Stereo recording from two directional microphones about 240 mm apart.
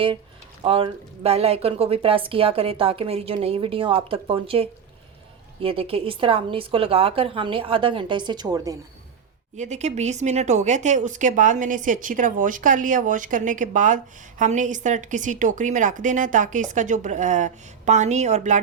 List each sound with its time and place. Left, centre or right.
0.6 s a woman's voice: right
9.6 s speech: right